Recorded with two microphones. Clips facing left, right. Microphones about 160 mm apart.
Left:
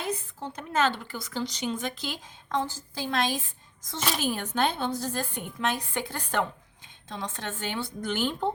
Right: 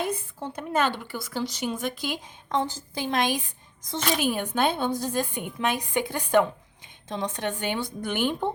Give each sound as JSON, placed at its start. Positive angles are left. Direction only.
{"t": 0.0, "sound": "speech", "side_deg": -10}